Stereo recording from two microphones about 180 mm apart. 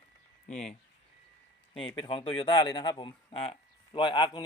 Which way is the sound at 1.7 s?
30° left (ahead or behind).